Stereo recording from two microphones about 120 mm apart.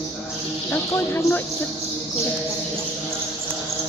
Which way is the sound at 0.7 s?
20° left (ahead or behind).